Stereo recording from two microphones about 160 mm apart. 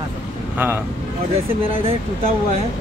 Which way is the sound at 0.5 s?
10° right (ahead or behind).